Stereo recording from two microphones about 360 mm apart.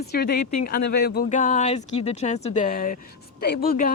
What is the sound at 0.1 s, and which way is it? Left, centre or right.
Speech, left.